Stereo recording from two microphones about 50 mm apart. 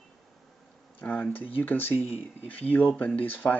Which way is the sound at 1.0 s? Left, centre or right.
Left.